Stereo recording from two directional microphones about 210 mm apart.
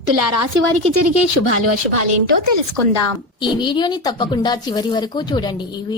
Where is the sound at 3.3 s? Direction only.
20° left (ahead or behind).